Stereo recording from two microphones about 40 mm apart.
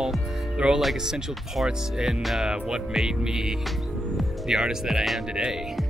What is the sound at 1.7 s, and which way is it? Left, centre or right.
Speech, centre.